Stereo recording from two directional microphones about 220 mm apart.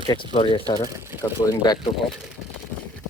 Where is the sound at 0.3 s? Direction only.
25° left (ahead or behind).